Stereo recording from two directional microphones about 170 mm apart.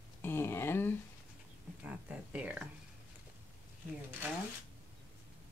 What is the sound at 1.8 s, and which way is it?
Speech, 5° right (ahead or behind).